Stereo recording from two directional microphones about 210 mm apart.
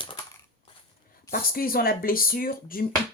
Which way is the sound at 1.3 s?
45° left (ahead or behind).